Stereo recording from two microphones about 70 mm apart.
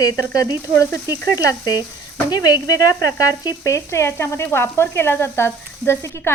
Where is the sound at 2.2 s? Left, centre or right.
Left.